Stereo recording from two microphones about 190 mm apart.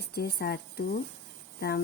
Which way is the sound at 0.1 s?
55° left (ahead or behind).